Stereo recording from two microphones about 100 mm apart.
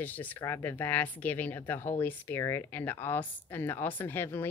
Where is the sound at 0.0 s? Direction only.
15° left (ahead or behind).